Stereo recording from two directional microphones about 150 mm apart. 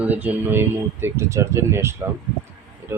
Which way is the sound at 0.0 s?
10° right (ahead or behind).